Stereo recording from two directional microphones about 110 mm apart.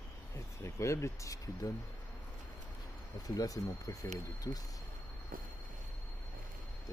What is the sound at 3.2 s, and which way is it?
Speech, 35° left (ahead or behind).